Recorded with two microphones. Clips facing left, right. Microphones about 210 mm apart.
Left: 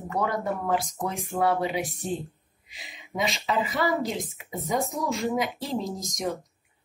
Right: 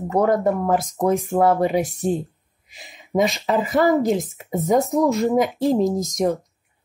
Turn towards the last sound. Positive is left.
turn(degrees=-45)  # may be behind; listen again after turning